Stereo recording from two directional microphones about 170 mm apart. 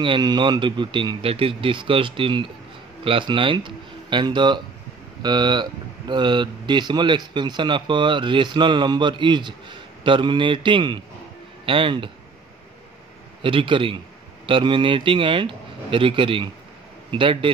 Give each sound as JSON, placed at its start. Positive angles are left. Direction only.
{"t": 0.0, "sound": "a man's voice", "side_deg": -25}
{"t": 13.4, "sound": "a man's voice", "side_deg": -30}